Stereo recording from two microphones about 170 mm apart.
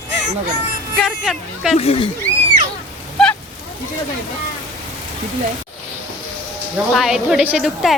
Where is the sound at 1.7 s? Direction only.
35° left (ahead or behind).